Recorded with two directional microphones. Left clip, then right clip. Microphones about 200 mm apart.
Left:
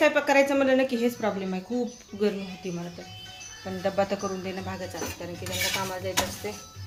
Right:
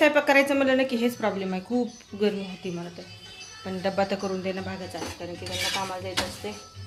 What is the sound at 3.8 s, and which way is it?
Speech, 10° right (ahead or behind).